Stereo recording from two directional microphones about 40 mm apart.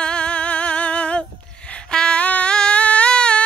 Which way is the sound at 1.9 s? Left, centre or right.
Left.